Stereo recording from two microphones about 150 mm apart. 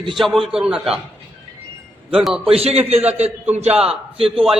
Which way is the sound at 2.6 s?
45° right (ahead or behind).